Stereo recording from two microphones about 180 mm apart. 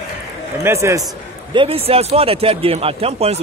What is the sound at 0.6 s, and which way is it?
Speech, 15° right (ahead or behind).